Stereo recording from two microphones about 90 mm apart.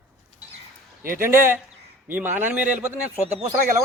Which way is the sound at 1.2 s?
25° right (ahead or behind).